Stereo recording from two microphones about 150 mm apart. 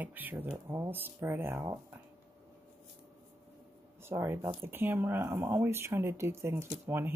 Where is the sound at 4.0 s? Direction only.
15° right (ahead or behind).